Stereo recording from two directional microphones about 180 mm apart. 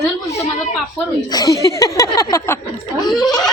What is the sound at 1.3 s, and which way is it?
A woman's voice, 20° left (ahead or behind).